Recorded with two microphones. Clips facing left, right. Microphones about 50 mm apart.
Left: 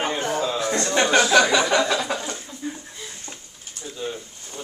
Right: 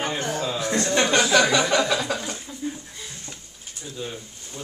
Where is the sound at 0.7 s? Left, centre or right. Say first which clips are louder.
Left 1 dB; centre.